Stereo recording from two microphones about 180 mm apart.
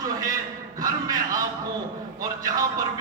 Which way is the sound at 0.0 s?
20° right (ahead or behind).